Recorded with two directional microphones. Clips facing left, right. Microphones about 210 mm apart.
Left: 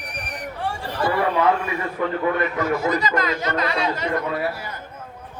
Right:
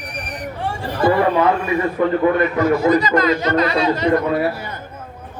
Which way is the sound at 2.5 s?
35° right (ahead or behind).